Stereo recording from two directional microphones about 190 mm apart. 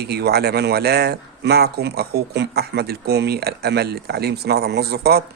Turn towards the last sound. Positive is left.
turn(degrees=-55)  # may be behind; listen again after turning